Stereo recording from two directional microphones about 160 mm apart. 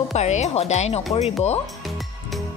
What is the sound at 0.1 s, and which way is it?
Speech, 45° left (ahead or behind).